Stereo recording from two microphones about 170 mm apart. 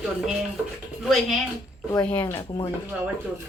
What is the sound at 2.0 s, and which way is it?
Speech, 10° left (ahead or behind).